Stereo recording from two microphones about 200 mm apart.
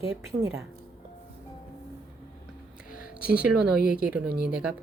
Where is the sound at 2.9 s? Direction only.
45° left (ahead or behind).